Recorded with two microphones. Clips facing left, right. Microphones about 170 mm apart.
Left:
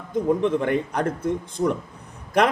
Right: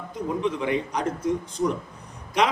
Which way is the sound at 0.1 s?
50° left (ahead or behind).